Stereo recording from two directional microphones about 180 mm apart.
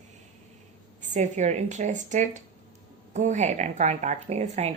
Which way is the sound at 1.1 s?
40° right (ahead or behind).